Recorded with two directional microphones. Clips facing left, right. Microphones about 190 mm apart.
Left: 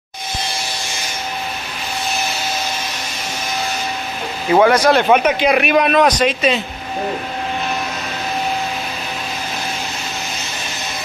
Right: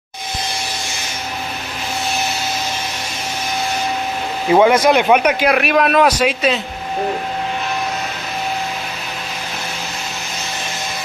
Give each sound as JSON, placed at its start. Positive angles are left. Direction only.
{"t": 4.6, "sound": "speech", "side_deg": -20}
{"t": 5.0, "sound": "speech", "side_deg": -5}